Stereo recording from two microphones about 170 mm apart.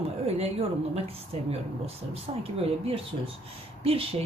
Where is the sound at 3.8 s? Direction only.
35° right (ahead or behind).